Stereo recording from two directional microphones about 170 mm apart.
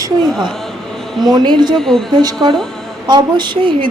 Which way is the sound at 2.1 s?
25° right (ahead or behind).